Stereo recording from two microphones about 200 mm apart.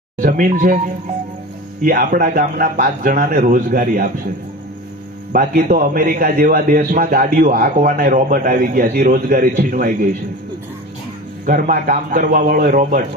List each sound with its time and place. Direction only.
0.2 s speech: 45° right (ahead or behind)
1.8 s a man's voice: 45° right (ahead or behind)
5.3 s a man's voice: 45° right (ahead or behind)
11.4 s a man's voice: 45° right (ahead or behind)